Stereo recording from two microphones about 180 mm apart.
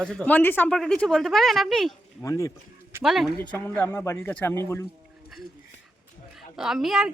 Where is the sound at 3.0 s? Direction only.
Centre (ahead or behind).